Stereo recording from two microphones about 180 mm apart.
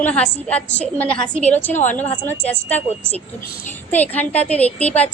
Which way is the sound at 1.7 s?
40° left (ahead or behind).